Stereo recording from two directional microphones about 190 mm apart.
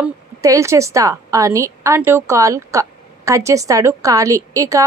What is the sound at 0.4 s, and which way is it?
Speech, 15° right (ahead or behind).